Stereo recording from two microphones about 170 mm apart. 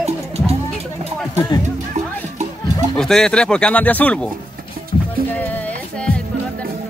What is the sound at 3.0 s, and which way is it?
Speech, 5° left (ahead or behind).